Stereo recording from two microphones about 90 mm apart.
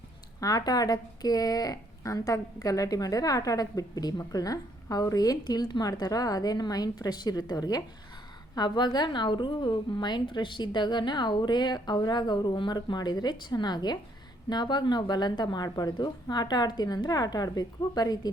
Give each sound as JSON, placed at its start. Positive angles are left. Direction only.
{"t": 0.3, "sound": "a woman's voice", "side_deg": 40}